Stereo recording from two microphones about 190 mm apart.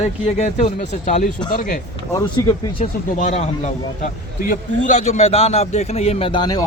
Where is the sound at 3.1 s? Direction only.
40° left (ahead or behind).